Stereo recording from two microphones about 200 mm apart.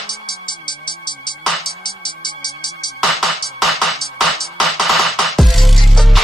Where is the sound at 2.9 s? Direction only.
Centre (ahead or behind).